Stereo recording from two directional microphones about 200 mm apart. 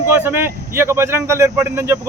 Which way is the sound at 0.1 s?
10° right (ahead or behind).